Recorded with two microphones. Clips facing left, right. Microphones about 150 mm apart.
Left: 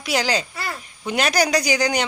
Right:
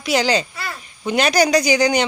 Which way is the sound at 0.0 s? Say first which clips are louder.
Right 4 dB; 5° left (ahead or behind).